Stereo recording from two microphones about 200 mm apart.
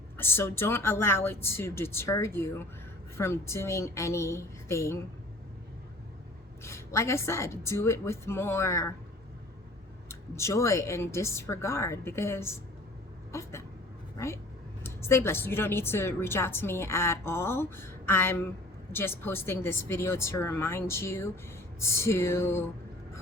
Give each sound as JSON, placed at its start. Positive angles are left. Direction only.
{"t": 0.2, "sound": "a woman's voice", "side_deg": 10}
{"t": 6.6, "sound": "a woman's voice", "side_deg": 15}
{"t": 10.1, "sound": "a woman's voice", "side_deg": 15}
{"t": 13.3, "sound": "a sound", "side_deg": 15}
{"t": 14.8, "sound": "a woman's voice", "side_deg": 10}